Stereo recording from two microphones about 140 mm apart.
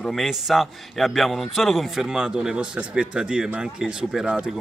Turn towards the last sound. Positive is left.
turn(degrees=-5)  # may be behind; listen again after turning